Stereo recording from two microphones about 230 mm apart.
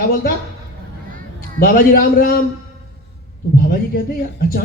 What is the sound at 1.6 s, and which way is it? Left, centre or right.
Speech, left.